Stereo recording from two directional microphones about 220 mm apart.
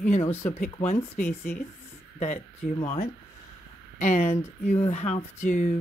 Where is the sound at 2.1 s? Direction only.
30° left (ahead or behind).